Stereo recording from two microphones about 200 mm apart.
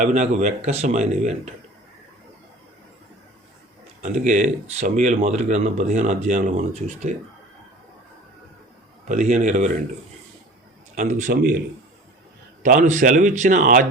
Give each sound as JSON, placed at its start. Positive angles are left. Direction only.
{"t": 0.0, "sound": "speech", "side_deg": -35}
{"t": 4.0, "sound": "speech", "side_deg": -35}
{"t": 9.0, "sound": "speech", "side_deg": -35}
{"t": 10.9, "sound": "speech", "side_deg": -40}
{"t": 12.6, "sound": "speech", "side_deg": -40}